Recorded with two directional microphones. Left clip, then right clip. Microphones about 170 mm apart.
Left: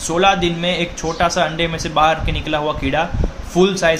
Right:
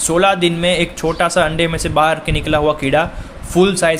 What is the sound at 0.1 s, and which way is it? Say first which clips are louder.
Speech: right 1 dB; 40° right (ahead or behind).